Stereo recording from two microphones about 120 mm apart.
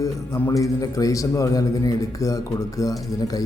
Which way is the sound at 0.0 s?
25° left (ahead or behind).